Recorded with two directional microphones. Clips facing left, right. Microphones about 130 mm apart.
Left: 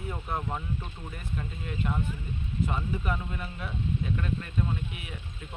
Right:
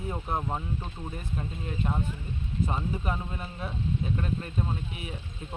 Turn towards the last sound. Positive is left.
turn(degrees=-35)  # may be behind; listen again after turning